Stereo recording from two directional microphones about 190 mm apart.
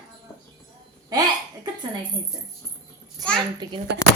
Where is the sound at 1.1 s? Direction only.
20° right (ahead or behind).